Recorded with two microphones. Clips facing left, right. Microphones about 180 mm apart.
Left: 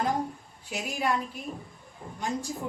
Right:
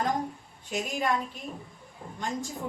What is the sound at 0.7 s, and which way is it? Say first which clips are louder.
Speech: right 1 dB; centre (ahead or behind).